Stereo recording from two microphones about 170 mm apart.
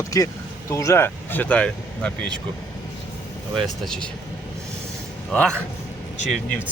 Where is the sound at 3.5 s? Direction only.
5° left (ahead or behind).